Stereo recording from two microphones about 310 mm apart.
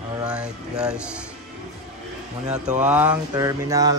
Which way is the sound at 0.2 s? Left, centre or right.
Centre.